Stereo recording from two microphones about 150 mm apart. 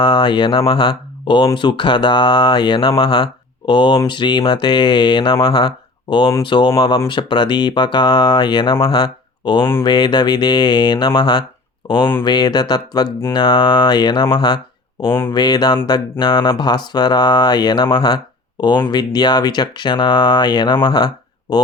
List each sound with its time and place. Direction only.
0.0 s speech: 35° left (ahead or behind)